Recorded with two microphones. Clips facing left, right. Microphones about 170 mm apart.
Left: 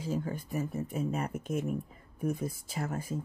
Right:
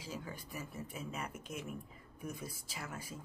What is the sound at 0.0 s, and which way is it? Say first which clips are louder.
Speech: left 11 dB; 50° left (ahead or behind).